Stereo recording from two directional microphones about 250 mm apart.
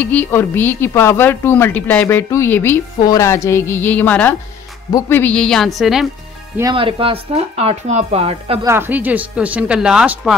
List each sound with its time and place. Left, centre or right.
0.0 s a woman's voice: centre
6.5 s speech: centre
8.6 s speech: centre